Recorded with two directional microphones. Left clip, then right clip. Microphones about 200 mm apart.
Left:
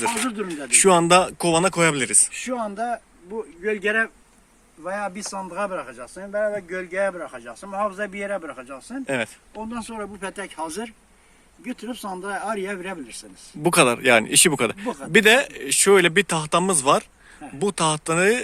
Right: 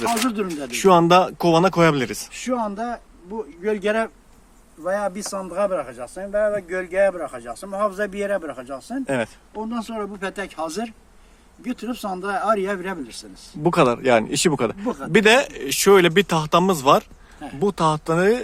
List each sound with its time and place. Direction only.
0.7 s speech: 5° left (ahead or behind)
2.6 s speech: 10° left (ahead or behind)
3.6 s speech: 20° right (ahead or behind)
4.8 s a man's voice: centre (ahead or behind)
9.0 s speech: 5° left (ahead or behind)
13.6 s speech: 10° left (ahead or behind)